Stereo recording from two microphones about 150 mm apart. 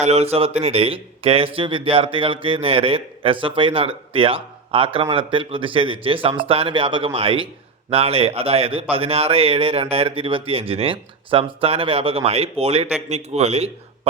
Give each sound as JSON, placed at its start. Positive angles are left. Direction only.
{"t": 0.0, "sound": "a man's voice", "side_deg": -45}